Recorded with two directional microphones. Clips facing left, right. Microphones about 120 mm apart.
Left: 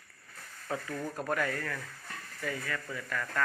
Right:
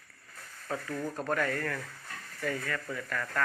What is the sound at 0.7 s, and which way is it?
Speech, 10° left (ahead or behind).